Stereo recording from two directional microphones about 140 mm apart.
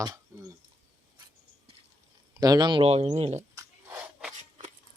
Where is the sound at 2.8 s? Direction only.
45° right (ahead or behind).